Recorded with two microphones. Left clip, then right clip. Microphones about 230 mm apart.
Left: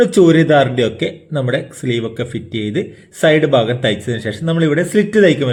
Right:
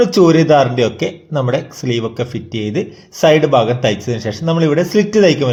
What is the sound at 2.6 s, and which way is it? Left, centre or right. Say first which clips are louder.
Speech: right 1 dB; centre.